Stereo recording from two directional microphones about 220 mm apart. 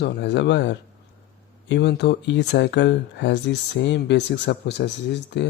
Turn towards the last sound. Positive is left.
turn(degrees=50)  # may be behind; listen again after turning